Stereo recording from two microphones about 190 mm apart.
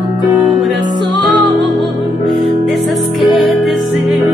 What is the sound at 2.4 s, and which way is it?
Music, centre (ahead or behind).